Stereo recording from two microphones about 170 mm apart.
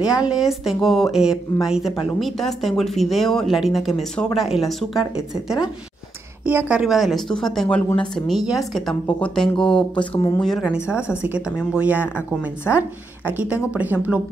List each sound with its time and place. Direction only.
0.0 s speech: 5° right (ahead or behind)
9.9 s speech: 25° left (ahead or behind)
10.4 s speech: centre (ahead or behind)